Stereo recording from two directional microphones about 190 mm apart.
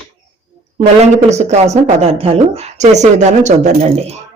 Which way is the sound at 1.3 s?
35° right (ahead or behind).